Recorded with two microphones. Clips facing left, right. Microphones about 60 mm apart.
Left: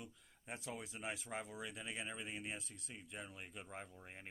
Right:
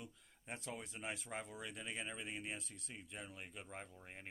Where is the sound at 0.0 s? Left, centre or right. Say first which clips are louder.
Even; centre.